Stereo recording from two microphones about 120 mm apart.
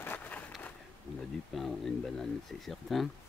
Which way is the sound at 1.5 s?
Centre (ahead or behind).